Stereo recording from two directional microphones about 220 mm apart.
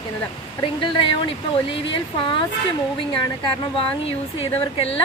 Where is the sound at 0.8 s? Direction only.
20° left (ahead or behind).